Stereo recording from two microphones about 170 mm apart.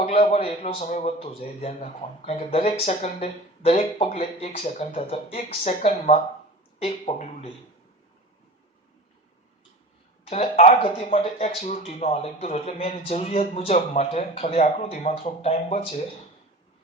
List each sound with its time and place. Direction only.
0.0 s a man's voice: 35° left (ahead or behind)
10.2 s a man's voice: 35° left (ahead or behind)